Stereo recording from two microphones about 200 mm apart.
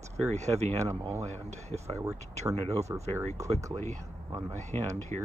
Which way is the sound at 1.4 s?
35° right (ahead or behind).